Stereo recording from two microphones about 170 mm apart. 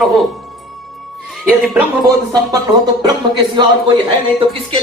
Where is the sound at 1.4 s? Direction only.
5° right (ahead or behind).